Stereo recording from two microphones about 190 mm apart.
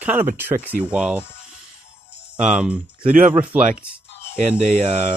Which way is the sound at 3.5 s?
5° right (ahead or behind).